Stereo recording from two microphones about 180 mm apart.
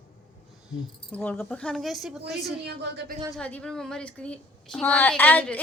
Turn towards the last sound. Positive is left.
turn(degrees=10)  # may be behind; listen again after turning